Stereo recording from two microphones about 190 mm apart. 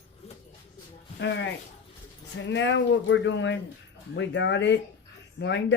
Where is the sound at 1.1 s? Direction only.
65° left (ahead or behind).